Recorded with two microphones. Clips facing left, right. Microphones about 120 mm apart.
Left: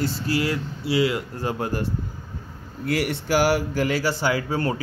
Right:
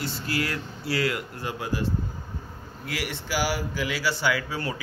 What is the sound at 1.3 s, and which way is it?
Speech, 40° left (ahead or behind).